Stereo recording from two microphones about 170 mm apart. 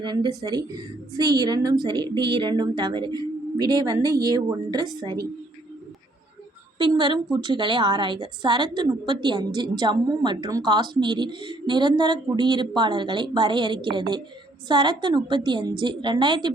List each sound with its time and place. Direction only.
0.0 s a woman's voice: 25° right (ahead or behind)
6.7 s a woman's voice: 25° right (ahead or behind)